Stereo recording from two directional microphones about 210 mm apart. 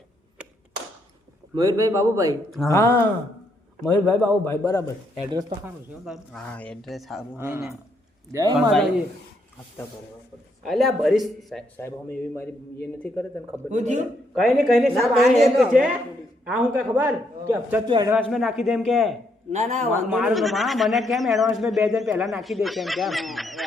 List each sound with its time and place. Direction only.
1.5 s speech: 15° right (ahead or behind)
2.6 s a man's voice: 15° left (ahead or behind)
5.6 s a man's voice: centre (ahead or behind)
7.3 s speech: 10° right (ahead or behind)
10.6 s a man's voice: centre (ahead or behind)
13.7 s a man's voice: 35° right (ahead or behind)
14.3 s a man's voice: centre (ahead or behind)
17.8 s a man's voice: 20° right (ahead or behind)
18.2 s a man's voice: centre (ahead or behind)
19.5 s a man's voice: 30° right (ahead or behind)
20.1 s a man's voice: 5° right (ahead or behind)